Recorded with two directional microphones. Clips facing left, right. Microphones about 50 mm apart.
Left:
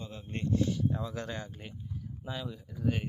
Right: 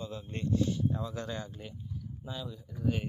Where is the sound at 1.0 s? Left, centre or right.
Left.